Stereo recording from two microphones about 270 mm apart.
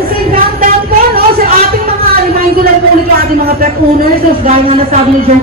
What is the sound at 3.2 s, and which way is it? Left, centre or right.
Speech, right.